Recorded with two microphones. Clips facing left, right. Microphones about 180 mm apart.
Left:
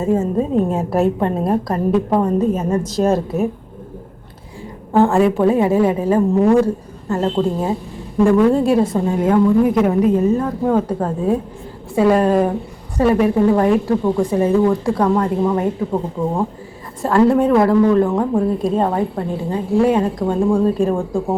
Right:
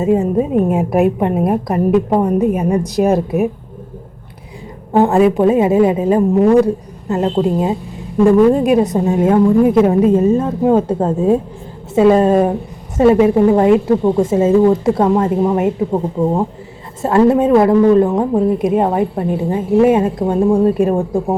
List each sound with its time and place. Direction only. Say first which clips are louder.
0.0 s a woman's voice: right 3 dB; 15° right (ahead or behind)
4.9 s a woman's voice: right 2 dB; 20° right (ahead or behind)